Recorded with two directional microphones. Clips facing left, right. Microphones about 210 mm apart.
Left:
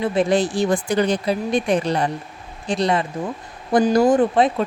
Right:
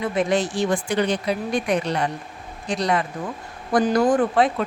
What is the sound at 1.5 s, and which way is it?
Speech, 25° left (ahead or behind).